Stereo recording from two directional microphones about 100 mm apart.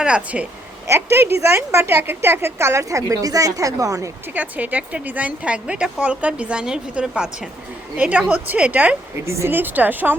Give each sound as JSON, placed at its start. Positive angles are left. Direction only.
{"t": 0.0, "sound": "a woman's voice", "side_deg": -10}
{"t": 0.9, "sound": "a woman's voice", "side_deg": -25}
{"t": 4.4, "sound": "a woman's voice", "side_deg": -15}
{"t": 9.2, "sound": "a woman's voice", "side_deg": -30}